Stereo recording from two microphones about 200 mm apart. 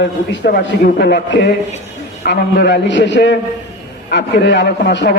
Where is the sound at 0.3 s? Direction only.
50° left (ahead or behind).